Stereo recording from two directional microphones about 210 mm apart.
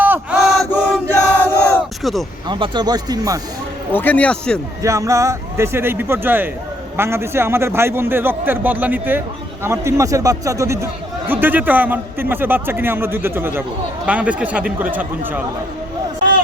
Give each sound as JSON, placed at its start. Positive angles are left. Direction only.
{"t": 0.0, "sound": "chant", "side_deg": -5}
{"t": 0.7, "sound": "battle cry", "side_deg": 10}
{"t": 2.5, "sound": "speech", "side_deg": -20}
{"t": 3.9, "sound": "speech", "side_deg": 10}
{"t": 4.8, "sound": "a man's voice", "side_deg": -15}